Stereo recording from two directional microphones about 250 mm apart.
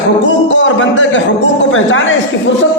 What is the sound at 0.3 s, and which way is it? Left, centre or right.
A man's voice, left.